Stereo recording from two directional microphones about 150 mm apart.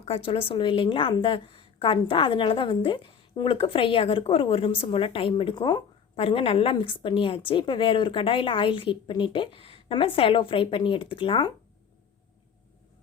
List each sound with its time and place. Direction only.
0.0 s a woman's voice: 40° left (ahead or behind)